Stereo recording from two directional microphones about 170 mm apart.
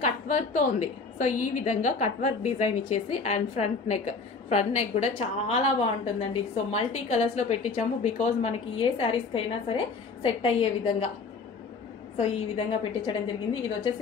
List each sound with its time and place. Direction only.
0.0 s a woman's voice: 45° left (ahead or behind)
12.2 s a woman's voice: 30° left (ahead or behind)